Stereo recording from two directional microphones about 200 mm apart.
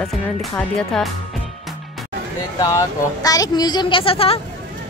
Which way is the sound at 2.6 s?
15° left (ahead or behind).